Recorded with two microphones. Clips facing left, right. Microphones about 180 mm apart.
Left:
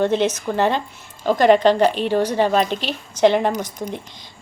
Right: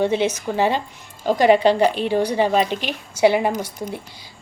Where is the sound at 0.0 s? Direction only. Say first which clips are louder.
Left 1 dB; 10° right (ahead or behind).